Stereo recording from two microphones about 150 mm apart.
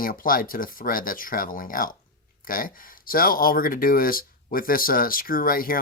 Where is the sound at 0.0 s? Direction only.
70° left (ahead or behind).